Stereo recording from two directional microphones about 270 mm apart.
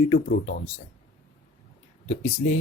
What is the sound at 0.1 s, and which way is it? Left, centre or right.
Speech, left.